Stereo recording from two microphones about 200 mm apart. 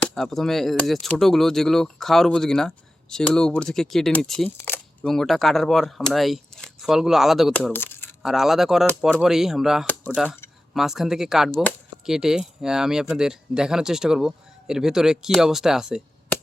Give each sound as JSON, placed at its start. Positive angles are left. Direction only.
{"t": 0.0, "sound": "speech", "side_deg": 0}
{"t": 7.7, "sound": "a sound", "side_deg": 10}
{"t": 8.2, "sound": "speech", "side_deg": 0}
{"t": 9.8, "sound": "speech", "side_deg": 10}
{"t": 10.8, "sound": "speech", "side_deg": 0}